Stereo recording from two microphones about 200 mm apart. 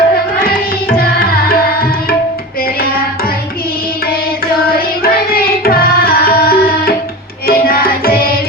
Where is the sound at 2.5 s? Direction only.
50° left (ahead or behind).